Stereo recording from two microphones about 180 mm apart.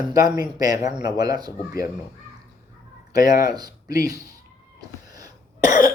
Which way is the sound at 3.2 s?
20° right (ahead or behind).